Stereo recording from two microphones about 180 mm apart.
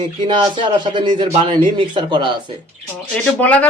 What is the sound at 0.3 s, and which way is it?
Speech, 25° right (ahead or behind).